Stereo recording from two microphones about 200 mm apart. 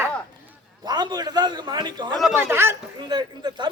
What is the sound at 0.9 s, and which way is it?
A man's voice, 20° right (ahead or behind).